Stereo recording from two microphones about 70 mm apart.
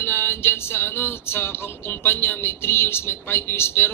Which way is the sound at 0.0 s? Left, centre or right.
Left.